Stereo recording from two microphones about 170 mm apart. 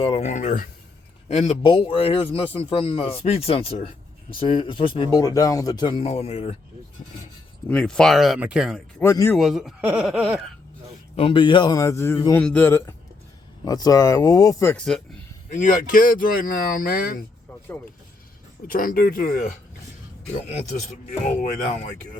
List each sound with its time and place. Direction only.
0.0 s speech: 40° left (ahead or behind)
1.3 s speech: 35° left (ahead or behind)
7.7 s speech: 5° left (ahead or behind)
9.0 s a man's voice: 15° left (ahead or behind)
9.3 s speech: centre (ahead or behind)
11.2 s a man's voice: 30° left (ahead or behind); by 14.8 s 15° left (ahead or behind)
15.5 s speech: 50° left (ahead or behind)
18.7 s speech: 60° left (ahead or behind)
20.5 s speech: 45° left (ahead or behind)